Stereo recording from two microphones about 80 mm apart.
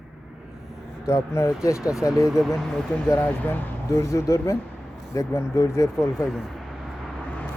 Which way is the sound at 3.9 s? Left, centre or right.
Left.